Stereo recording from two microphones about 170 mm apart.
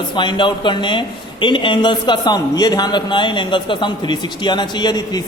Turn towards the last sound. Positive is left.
turn(degrees=25)  # may be behind; listen again after turning